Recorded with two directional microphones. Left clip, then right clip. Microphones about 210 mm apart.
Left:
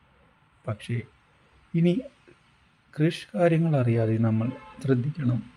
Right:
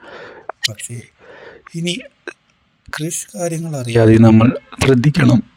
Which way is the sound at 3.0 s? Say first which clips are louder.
Left 1 dB; centre (ahead or behind).